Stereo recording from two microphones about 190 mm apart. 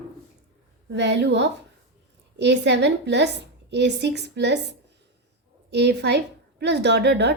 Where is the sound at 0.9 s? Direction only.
65° right (ahead or behind).